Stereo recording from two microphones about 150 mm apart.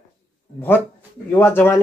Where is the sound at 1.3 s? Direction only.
15° left (ahead or behind).